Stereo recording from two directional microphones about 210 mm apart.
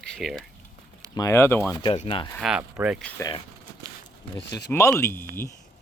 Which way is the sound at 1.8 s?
25° left (ahead or behind).